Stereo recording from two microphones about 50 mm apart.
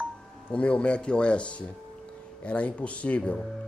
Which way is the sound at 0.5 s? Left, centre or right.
Left.